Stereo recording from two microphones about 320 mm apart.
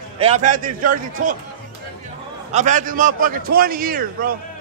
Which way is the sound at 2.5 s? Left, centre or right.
Right.